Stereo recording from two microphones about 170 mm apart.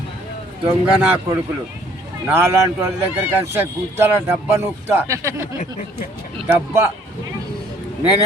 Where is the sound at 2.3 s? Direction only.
15° right (ahead or behind).